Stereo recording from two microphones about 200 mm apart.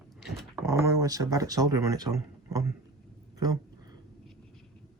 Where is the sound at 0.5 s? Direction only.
15° right (ahead or behind).